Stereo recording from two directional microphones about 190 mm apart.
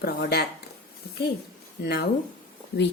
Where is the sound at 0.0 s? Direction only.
55° left (ahead or behind).